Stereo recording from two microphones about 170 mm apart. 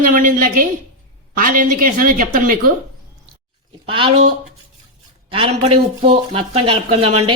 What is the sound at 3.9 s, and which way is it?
Speech, 30° right (ahead or behind).